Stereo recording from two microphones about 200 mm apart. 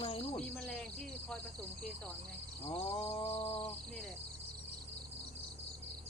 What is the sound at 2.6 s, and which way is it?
Mantra, 25° left (ahead or behind).